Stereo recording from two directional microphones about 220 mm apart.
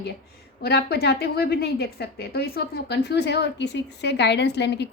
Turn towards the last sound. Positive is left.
turn(degrees=50)  # may be behind; listen again after turning